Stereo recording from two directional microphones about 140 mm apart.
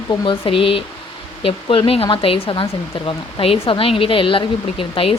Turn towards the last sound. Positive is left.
turn(degrees=40)  # may be behind; listen again after turning